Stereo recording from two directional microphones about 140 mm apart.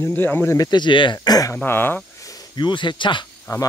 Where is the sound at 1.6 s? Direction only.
15° left (ahead or behind); by 3.2 s 35° left (ahead or behind).